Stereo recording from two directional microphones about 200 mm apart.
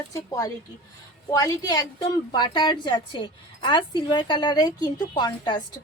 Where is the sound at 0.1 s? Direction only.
15° left (ahead or behind).